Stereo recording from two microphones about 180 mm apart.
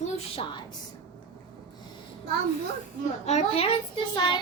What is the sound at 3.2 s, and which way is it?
Speech, 40° left (ahead or behind).